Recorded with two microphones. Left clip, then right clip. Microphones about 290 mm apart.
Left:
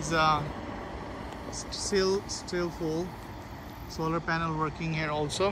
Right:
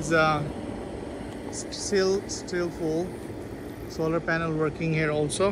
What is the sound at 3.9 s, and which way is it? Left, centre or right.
Speech, centre.